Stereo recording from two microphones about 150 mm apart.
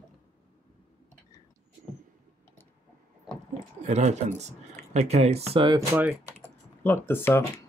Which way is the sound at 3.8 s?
50° right (ahead or behind).